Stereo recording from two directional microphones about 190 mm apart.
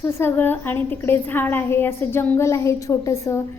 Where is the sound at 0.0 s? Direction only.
15° left (ahead or behind).